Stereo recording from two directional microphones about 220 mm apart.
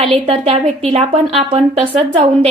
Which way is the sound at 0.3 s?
25° right (ahead or behind).